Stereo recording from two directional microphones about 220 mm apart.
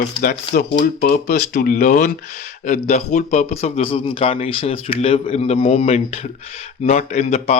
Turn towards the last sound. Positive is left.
turn(degrees=30)  # may be behind; listen again after turning